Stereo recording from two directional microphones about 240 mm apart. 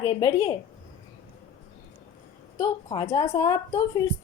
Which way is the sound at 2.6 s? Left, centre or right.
Centre.